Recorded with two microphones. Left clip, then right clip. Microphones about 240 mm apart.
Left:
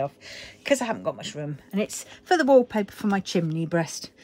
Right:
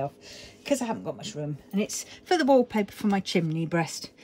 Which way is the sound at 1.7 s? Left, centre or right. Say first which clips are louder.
Left 3 dB; centre.